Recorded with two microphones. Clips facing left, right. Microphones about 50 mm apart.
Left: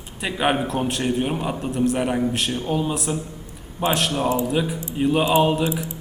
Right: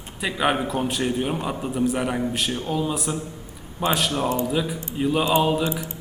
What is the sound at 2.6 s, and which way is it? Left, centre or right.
Speech, centre.